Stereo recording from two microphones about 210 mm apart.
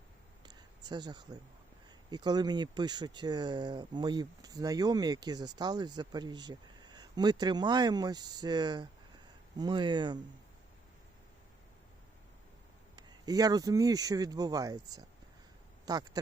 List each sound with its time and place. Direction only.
0.4 s a sound: 20° right (ahead or behind)
2.0 s speech: 20° right (ahead or behind)
13.0 s speech: 20° right (ahead or behind)